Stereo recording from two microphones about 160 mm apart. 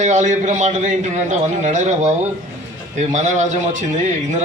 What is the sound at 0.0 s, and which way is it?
A man's voice, 50° right (ahead or behind).